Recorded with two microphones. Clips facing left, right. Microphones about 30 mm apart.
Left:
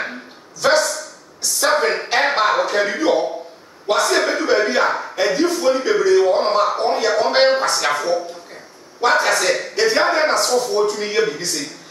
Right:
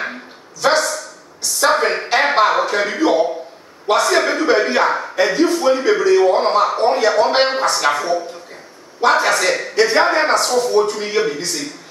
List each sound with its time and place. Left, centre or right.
0.6 s dog: centre
1.4 s a sound: centre
3.8 s speech: centre
5.8 s speech: centre
6.0 s speech: centre